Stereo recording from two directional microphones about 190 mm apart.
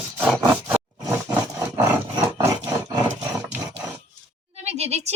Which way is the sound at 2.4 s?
20° right (ahead or behind).